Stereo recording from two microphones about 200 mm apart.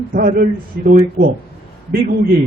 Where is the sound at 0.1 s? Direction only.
45° right (ahead or behind).